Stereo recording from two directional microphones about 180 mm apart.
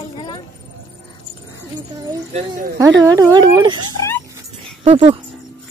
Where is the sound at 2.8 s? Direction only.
20° right (ahead or behind).